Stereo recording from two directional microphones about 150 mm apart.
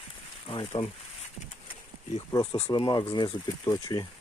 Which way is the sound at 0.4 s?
35° left (ahead or behind).